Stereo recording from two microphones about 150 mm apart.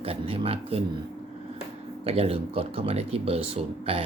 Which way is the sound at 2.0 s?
40° right (ahead or behind).